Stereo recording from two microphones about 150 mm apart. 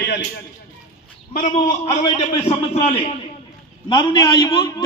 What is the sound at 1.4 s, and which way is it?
A man's voice, 50° left (ahead or behind).